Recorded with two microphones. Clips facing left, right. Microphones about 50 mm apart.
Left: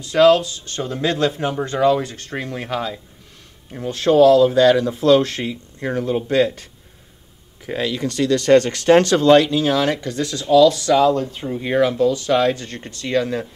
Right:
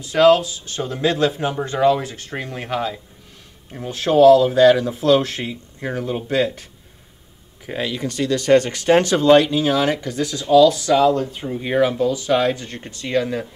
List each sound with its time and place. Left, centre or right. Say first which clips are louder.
0.1 s speech: even; centre
3.9 s speech: left 3 dB; centre
4.2 s speech: right 1 dB; right
4.5 s speech: right 1 dB; centre
7.7 s speech: left 2 dB; centre